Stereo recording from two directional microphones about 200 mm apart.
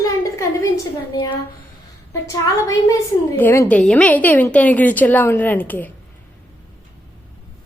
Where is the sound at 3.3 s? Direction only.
10° left (ahead or behind).